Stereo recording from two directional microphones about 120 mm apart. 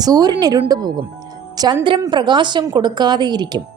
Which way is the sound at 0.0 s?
35° right (ahead or behind).